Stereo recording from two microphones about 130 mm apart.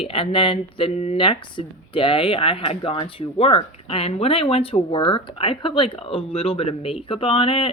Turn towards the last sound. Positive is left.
turn(degrees=45)  # may be behind; listen again after turning